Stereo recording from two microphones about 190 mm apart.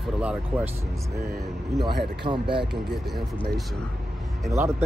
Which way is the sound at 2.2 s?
25° right (ahead or behind).